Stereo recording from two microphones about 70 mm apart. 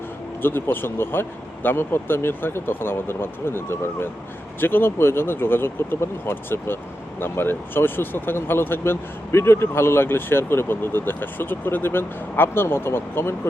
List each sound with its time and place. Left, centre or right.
0.4 s speech: left